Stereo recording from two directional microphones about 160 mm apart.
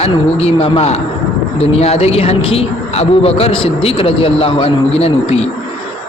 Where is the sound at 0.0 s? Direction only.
40° left (ahead or behind).